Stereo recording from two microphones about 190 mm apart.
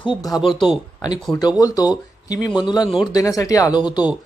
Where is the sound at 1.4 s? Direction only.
20° left (ahead or behind).